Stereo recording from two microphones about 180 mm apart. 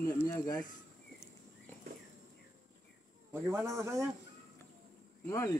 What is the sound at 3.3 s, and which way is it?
Speech, 15° right (ahead or behind).